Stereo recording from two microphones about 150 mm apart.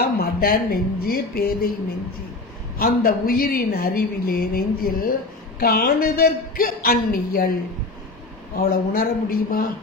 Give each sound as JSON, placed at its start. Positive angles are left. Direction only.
{"t": 0.0, "sound": "speech", "side_deg": 85}
{"t": 2.8, "sound": "speech", "side_deg": 75}
{"t": 5.6, "sound": "a man's voice", "side_deg": 85}
{"t": 8.6, "sound": "speech", "side_deg": 75}